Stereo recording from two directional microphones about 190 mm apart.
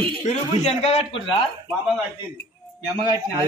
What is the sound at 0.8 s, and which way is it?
Speech, 35° left (ahead or behind).